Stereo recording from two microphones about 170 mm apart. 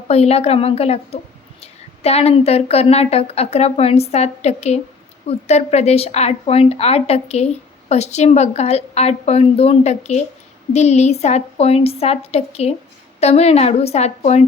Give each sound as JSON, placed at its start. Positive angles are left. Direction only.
{"t": 0.1, "sound": "a woman's voice", "side_deg": 40}